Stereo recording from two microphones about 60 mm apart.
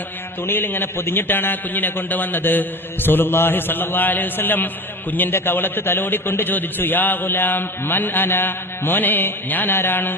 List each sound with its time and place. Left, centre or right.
0.4 s a man's voice: left